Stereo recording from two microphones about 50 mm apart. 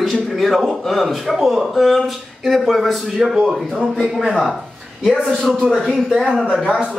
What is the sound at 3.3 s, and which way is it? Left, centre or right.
Speech, centre.